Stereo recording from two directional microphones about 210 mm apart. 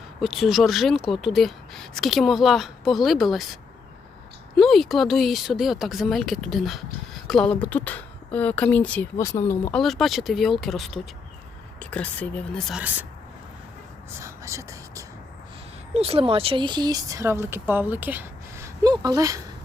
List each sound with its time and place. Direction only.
0.2 s speech: centre (ahead or behind)
4.6 s speech: centre (ahead or behind)
9.7 s speech: centre (ahead or behind)
14.2 s whispering: 15° right (ahead or behind)
16.0 s speech: 25° right (ahead or behind)